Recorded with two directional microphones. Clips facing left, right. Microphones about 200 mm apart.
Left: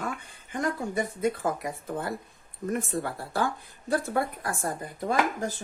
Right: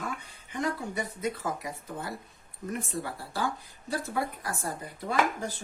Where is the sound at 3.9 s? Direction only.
55° left (ahead or behind).